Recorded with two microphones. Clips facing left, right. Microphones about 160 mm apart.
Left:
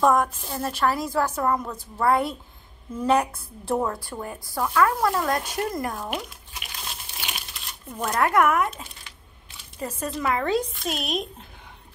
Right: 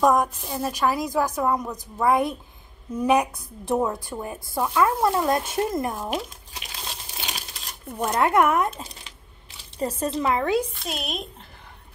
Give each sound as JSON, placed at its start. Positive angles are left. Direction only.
{"t": 0.0, "sound": "a woman's voice", "side_deg": -15}
{"t": 10.4, "sound": "a woman's voice", "side_deg": -10}
{"t": 10.9, "sound": "speech", "side_deg": 0}